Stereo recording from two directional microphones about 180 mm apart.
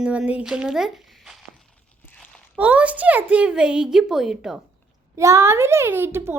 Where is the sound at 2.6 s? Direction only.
10° right (ahead or behind).